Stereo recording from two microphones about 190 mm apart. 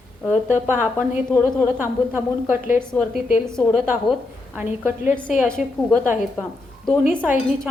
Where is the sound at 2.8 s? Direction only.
5° left (ahead or behind).